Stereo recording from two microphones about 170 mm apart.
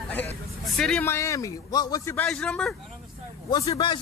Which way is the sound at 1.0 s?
15° left (ahead or behind).